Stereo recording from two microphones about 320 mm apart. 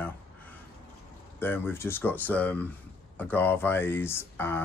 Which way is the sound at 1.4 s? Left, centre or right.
Centre.